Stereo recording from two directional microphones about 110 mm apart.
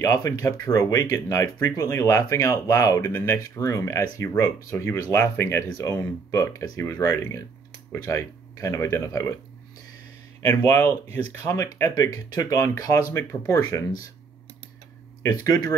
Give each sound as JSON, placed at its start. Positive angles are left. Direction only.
{"t": 0.0, "sound": "speech", "side_deg": 30}
{"t": 10.4, "sound": "speech", "side_deg": 20}
{"t": 15.2, "sound": "speech", "side_deg": 35}